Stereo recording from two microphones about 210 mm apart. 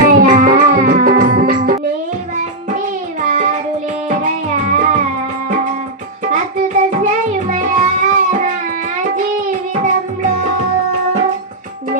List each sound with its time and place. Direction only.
0.0 s music: 45° right (ahead or behind)
2.7 s child singing: 40° right (ahead or behind)
4.1 s music: 35° right (ahead or behind)
6.3 s music: 35° right (ahead or behind)